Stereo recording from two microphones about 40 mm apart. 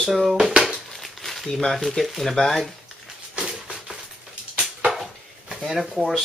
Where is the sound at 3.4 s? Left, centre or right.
Centre.